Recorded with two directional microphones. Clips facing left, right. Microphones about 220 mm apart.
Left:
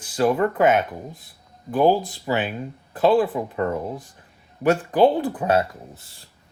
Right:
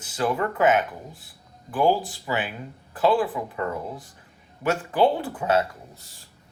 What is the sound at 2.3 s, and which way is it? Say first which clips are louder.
Speech: left 5 dB; 30° left (ahead or behind).